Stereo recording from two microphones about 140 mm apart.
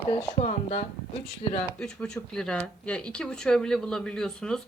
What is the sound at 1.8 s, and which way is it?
Speech, 5° left (ahead or behind).